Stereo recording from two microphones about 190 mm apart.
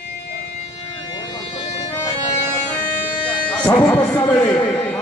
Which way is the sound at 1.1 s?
20° left (ahead or behind).